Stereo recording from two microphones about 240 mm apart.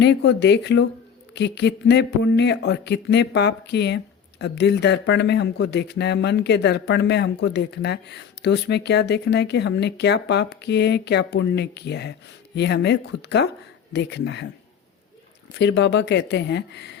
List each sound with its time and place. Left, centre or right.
0.0 s speech: left
15.5 s speech: left